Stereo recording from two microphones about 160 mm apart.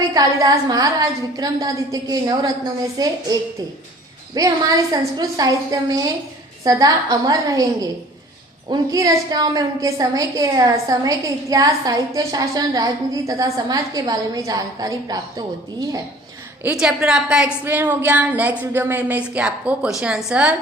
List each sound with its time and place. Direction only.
0.1 s a woman's voice: 20° right (ahead or behind)
4.4 s a woman's voice: 25° right (ahead or behind)
16.6 s a woman's voice: 5° right (ahead or behind)